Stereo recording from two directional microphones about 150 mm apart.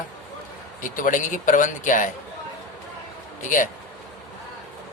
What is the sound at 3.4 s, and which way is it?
Speech, 60° left (ahead or behind).